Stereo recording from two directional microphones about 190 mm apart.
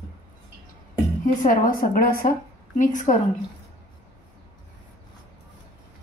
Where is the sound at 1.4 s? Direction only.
50° left (ahead or behind).